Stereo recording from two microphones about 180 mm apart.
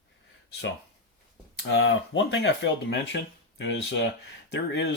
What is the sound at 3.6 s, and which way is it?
Speech, 90° left.